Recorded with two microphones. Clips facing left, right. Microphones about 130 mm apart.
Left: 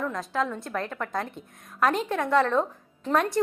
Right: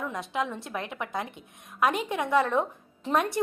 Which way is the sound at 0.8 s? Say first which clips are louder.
Left 3 dB; 15° right (ahead or behind).